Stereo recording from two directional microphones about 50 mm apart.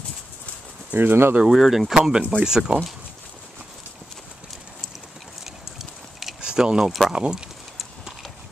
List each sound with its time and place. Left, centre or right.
0.9 s speech: right
1.4 s speech: centre
5.4 s clip-clop: centre
6.4 s a sound: centre
7.1 s speech: centre